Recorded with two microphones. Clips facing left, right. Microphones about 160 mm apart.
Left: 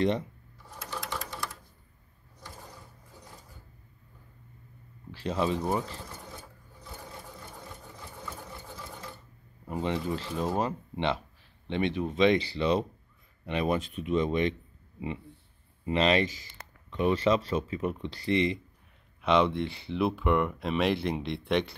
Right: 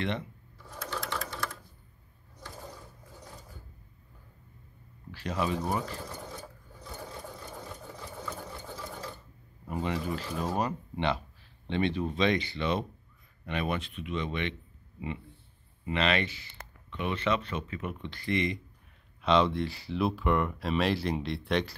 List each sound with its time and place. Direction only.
5.1 s speech: 25° left (ahead or behind)
9.7 s speech: 20° left (ahead or behind)
12.4 s speech: 30° left (ahead or behind)
15.8 s speech: 35° left (ahead or behind); by 21.6 s 20° left (ahead or behind)